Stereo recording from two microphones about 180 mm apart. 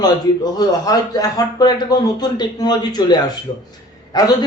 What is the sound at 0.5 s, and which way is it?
A man's voice, 20° left (ahead or behind).